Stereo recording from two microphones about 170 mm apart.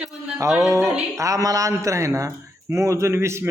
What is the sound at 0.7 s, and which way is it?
A man's voice, 15° right (ahead or behind).